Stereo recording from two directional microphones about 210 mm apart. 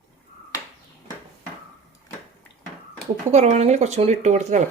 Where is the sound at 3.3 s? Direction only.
30° right (ahead or behind).